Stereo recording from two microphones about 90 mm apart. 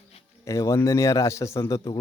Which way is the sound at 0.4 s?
35° left (ahead or behind).